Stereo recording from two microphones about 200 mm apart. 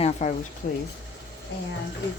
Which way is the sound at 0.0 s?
35° left (ahead or behind).